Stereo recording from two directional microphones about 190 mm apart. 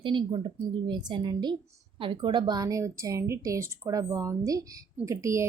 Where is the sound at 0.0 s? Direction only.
25° right (ahead or behind).